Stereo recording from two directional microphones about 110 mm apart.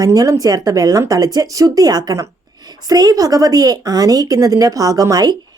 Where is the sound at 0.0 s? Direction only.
35° right (ahead or behind).